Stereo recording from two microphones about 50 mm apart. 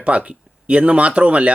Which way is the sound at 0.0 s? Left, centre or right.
Right.